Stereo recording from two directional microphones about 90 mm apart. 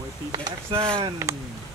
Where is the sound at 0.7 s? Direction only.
90° right.